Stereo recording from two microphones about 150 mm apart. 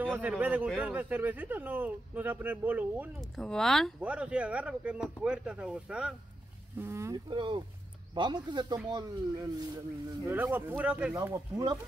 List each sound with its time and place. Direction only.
0.0 s speech: 10° right (ahead or behind)
3.2 s speech: 5° left (ahead or behind)
4.0 s speech: 10° right (ahead or behind)
6.8 s speech: 20° right (ahead or behind)
7.2 s speech: 30° right (ahead or behind)
10.2 s speech: 15° right (ahead or behind)
11.1 s speech: 20° right (ahead or behind)